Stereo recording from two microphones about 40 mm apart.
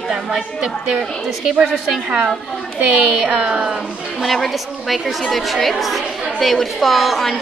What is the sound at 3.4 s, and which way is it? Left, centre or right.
Speech, centre.